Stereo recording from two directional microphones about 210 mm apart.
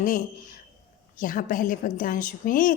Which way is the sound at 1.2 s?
40° left (ahead or behind).